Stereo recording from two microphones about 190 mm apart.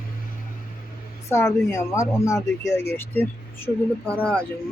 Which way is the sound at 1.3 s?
15° left (ahead or behind).